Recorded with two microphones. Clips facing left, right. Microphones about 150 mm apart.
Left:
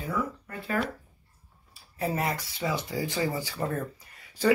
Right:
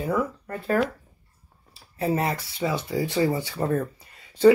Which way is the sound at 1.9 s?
25° right (ahead or behind).